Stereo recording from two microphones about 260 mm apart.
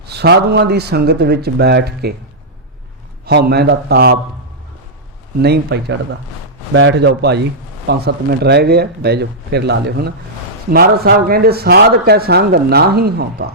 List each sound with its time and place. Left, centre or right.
0.0 s a man's voice: right
3.2 s a man's voice: right
5.4 s a man's voice: right